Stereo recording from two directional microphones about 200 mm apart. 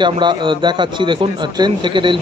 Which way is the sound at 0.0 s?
25° right (ahead or behind).